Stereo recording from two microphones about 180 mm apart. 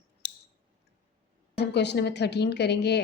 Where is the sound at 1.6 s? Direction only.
70° left (ahead or behind).